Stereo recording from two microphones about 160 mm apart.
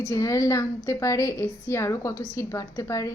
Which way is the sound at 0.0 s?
20° left (ahead or behind).